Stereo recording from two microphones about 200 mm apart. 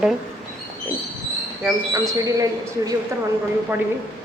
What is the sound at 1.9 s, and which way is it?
Speech, 15° right (ahead or behind).